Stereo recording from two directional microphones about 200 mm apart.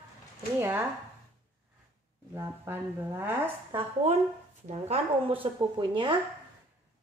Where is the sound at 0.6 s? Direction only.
10° right (ahead or behind).